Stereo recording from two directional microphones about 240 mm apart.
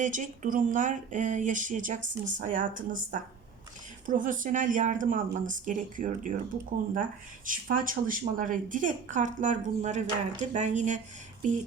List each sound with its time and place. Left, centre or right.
0.0 s speech: right
7.4 s speech: right